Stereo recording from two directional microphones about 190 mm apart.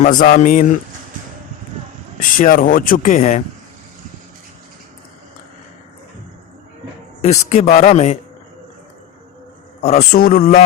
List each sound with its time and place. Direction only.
0.0 s speech: 45° left (ahead or behind)
2.4 s speech: 45° left (ahead or behind)
7.2 s a man's voice: 35° left (ahead or behind)
9.8 s a man's voice: 35° left (ahead or behind)
10.1 s speech: 50° left (ahead or behind)